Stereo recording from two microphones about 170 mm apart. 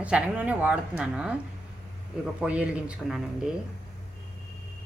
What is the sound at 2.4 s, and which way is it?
Speech, 5° right (ahead or behind).